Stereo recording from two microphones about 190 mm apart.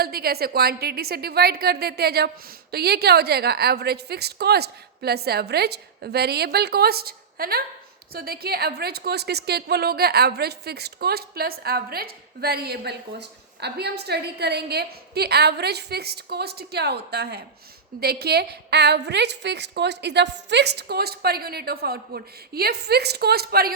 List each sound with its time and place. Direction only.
0.0 s a woman's voice: 55° right (ahead or behind)